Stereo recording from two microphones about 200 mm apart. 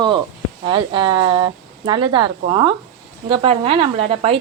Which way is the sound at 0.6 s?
25° right (ahead or behind).